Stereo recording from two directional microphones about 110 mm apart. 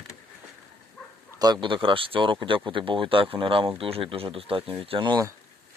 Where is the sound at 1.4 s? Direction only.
45° right (ahead or behind).